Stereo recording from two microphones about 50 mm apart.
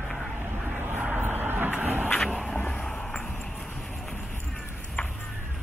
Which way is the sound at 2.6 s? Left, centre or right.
Left.